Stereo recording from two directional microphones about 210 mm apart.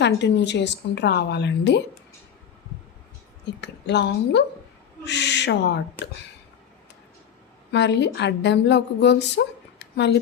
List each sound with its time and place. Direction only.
0.0 s a woman's voice: 55° left (ahead or behind)
3.6 s a woman's voice: 55° left (ahead or behind)
5.0 s owl: 55° left (ahead or behind)
7.7 s a woman's voice: 55° left (ahead or behind)